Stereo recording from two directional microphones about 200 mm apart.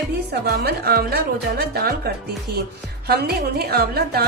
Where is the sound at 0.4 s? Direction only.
50° right (ahead or behind).